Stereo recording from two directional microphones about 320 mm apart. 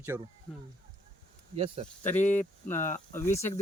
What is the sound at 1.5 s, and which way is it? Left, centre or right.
Speech, centre.